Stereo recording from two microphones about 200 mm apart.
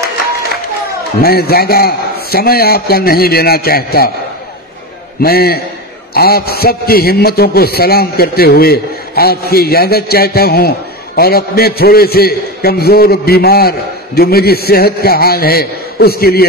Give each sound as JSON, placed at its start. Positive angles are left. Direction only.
{"t": 1.2, "sound": "a man's voice", "side_deg": 50}
{"t": 5.2, "sound": "a man's voice", "side_deg": 50}